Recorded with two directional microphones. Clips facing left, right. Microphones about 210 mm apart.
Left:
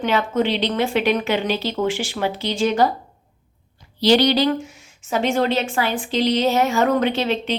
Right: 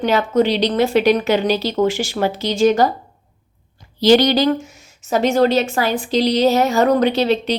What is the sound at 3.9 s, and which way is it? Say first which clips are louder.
A woman's voice: right 3 dB; 45° right (ahead or behind).